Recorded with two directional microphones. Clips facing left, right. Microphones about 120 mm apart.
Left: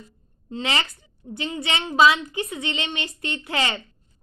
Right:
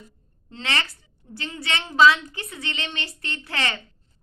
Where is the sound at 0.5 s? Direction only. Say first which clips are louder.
Left 3 dB; 20° left (ahead or behind).